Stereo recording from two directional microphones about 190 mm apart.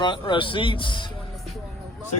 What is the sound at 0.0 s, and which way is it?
Speech, 25° left (ahead or behind).